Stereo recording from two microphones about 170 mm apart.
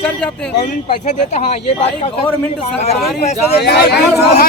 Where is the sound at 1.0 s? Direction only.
40° left (ahead or behind).